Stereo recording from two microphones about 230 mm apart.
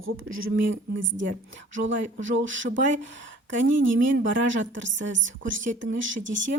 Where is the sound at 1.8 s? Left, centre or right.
Right.